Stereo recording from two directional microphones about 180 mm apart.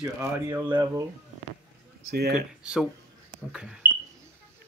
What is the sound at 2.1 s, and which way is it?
Speech, 60° right (ahead or behind).